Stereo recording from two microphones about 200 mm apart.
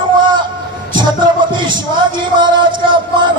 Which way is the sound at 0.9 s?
25° right (ahead or behind).